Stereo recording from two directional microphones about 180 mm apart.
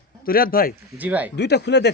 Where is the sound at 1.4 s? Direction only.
70° left (ahead or behind).